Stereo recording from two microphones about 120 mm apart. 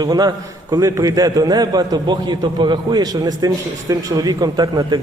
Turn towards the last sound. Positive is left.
turn(degrees=-35)  # may be behind; listen again after turning